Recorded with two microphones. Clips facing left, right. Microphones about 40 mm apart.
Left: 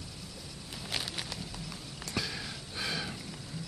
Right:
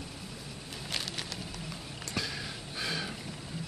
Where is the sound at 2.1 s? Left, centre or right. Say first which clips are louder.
Even; centre.